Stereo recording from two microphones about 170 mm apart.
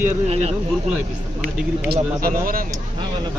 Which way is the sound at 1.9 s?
60° right (ahead or behind).